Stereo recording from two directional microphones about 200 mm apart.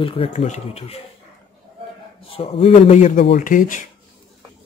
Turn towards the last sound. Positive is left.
turn(degrees=40)  # may be behind; listen again after turning